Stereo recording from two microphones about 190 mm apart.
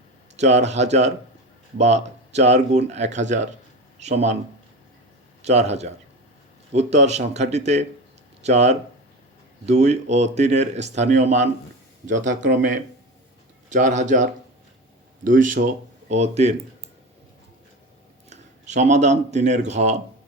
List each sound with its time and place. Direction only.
0.3 s speech: 35° right (ahead or behind)
5.4 s a man's voice: 35° right (ahead or behind)
18.3 s speech: 40° right (ahead or behind)